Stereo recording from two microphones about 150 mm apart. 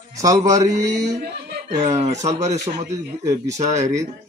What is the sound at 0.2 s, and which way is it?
Speech, 20° right (ahead or behind).